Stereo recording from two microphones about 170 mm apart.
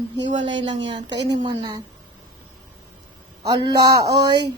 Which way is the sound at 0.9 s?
25° right (ahead or behind).